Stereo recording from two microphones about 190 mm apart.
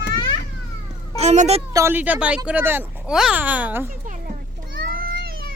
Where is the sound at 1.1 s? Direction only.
35° right (ahead or behind).